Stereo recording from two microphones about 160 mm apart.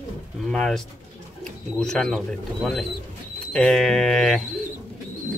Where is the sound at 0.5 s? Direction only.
5° left (ahead or behind).